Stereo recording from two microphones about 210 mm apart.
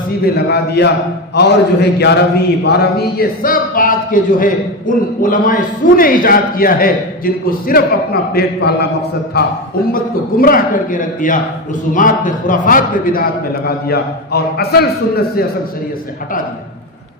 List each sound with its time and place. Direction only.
0.3 s a man's voice: 50° left (ahead or behind)